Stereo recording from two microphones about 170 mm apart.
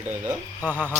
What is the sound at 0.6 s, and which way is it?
Speech, 10° right (ahead or behind).